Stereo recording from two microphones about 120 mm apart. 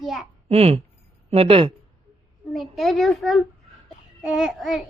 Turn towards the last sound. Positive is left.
turn(degrees=-5)  # may be behind; listen again after turning